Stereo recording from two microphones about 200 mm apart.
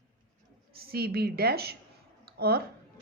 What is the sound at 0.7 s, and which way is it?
A woman's voice, 50° right (ahead or behind).